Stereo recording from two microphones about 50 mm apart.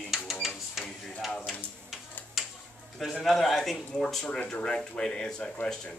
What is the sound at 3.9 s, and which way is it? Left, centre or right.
Speech, centre.